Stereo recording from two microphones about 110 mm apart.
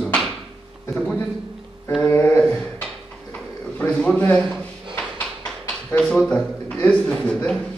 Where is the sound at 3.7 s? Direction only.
10° left (ahead or behind).